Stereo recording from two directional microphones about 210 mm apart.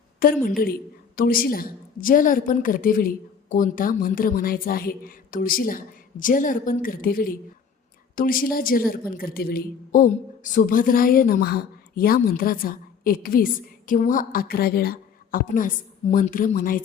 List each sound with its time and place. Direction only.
0.2 s a woman's voice: 45° left (ahead or behind)